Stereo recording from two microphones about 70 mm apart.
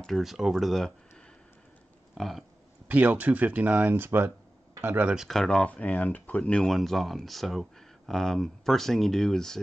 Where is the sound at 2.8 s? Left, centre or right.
Right.